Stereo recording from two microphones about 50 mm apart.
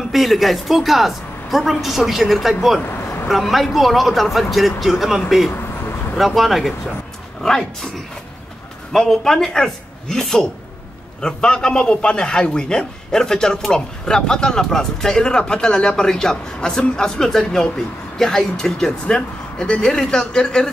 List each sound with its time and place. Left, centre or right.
0.1 s a woman's voice: centre
2.9 s vehicle: left
3.3 s a woman's voice: centre
5.5 s a sound: left
6.1 s a woman's voice: centre
8.9 s a man's voice: centre